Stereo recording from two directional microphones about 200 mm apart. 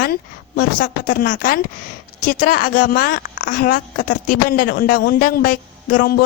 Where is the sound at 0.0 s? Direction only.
45° left (ahead or behind).